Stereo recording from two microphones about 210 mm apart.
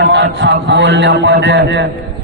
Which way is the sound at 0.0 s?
55° right (ahead or behind).